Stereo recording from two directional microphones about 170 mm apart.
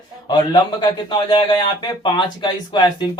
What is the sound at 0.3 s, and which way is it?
Speech, 25° left (ahead or behind).